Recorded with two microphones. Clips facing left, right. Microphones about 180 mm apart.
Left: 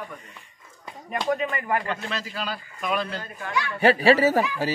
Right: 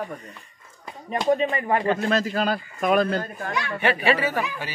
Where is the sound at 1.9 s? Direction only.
45° right (ahead or behind).